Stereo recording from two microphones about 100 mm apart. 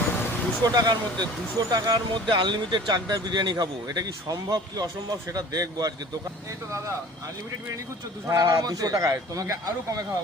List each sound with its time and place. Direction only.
0.6 s a man's voice: 40° right (ahead or behind)
8.3 s a man's voice: 40° right (ahead or behind)